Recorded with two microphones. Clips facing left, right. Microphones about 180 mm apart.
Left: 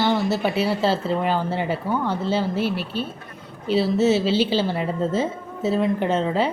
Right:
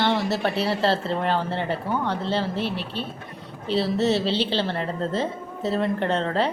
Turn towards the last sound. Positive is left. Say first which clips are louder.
# left 2 dB
turn(degrees=5)  # may be behind; listen again after turning